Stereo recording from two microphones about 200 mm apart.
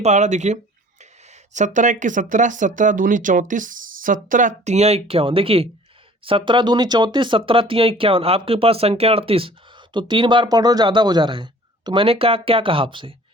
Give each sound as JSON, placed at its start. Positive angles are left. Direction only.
{"t": 0.0, "sound": "speech", "side_deg": -35}